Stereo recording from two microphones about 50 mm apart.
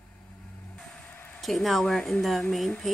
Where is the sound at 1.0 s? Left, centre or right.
Left.